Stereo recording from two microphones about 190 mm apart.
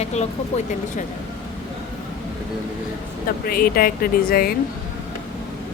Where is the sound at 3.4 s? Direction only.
50° left (ahead or behind).